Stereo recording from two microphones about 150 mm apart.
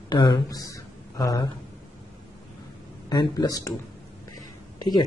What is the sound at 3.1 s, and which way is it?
Speech, 25° left (ahead or behind).